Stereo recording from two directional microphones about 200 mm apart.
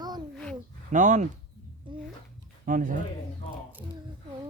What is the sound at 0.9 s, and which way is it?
Speech, 40° right (ahead or behind).